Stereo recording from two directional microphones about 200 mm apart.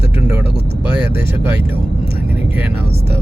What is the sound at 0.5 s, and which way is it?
Speech, 60° right (ahead or behind).